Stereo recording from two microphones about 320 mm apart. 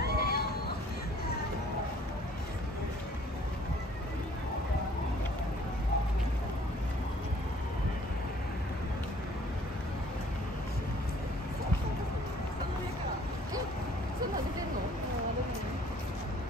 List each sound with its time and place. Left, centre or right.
0.0 s cat: left